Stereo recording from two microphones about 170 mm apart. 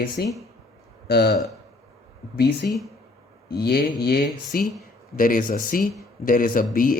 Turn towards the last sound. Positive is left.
turn(degrees=55)  # may be behind; listen again after turning